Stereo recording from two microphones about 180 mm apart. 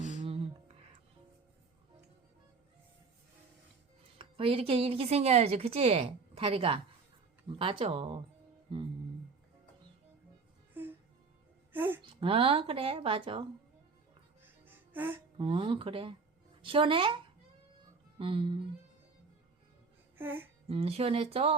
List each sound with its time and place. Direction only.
0.2 s music: 30° right (ahead or behind)
4.2 s a woman's voice: 30° right (ahead or behind)
11.7 s a woman's voice: 10° right (ahead or behind)
12.0 s a woman's voice: 30° right (ahead or behind)
14.7 s music: 10° right (ahead or behind)
15.4 s speech: 30° right (ahead or behind)
18.2 s speech: 30° right (ahead or behind)
20.1 s music: 10° right (ahead or behind)
20.7 s a woman's voice: 35° right (ahead or behind)